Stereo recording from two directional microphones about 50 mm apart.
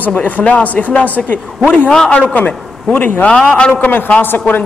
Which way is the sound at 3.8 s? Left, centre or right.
Left.